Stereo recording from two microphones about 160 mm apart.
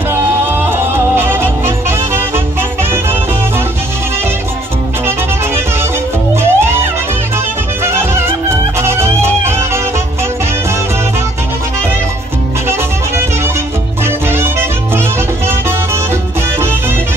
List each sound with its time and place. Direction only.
0.1 s music: 15° right (ahead or behind)
5.0 s music: 15° right (ahead or behind)
7.8 s music: 15° right (ahead or behind)
14.0 s music: 15° right (ahead or behind)